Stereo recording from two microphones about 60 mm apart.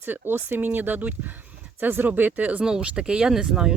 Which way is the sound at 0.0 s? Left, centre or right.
Right.